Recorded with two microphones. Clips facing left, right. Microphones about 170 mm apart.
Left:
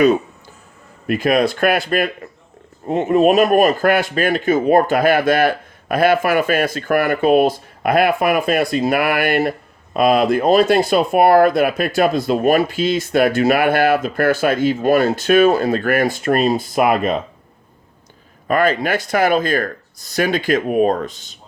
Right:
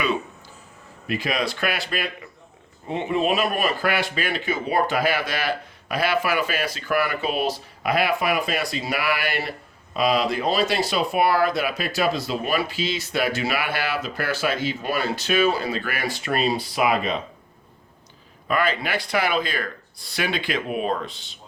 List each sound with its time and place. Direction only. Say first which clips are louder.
1.0 s a man's voice: left 9 dB; 50° left (ahead or behind)
18.4 s a man's voice: left 7 dB; 45° left (ahead or behind)